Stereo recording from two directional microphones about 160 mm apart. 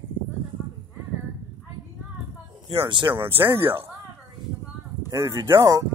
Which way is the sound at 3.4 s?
15° right (ahead or behind).